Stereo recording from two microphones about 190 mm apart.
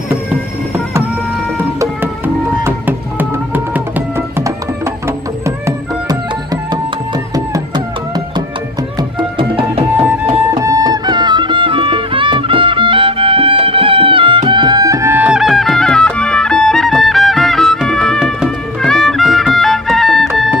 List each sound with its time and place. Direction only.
1.8 s music: 15° right (ahead or behind)
5.7 s music: 20° right (ahead or behind)
9.4 s music: 30° right (ahead or behind)
10.0 s music: 15° right (ahead or behind); by 20.2 s centre (ahead or behind)